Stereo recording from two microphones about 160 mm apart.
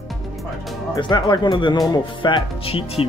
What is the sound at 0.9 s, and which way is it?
Speech, 30° left (ahead or behind).